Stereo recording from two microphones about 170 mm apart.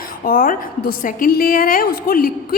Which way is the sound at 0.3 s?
60° left (ahead or behind).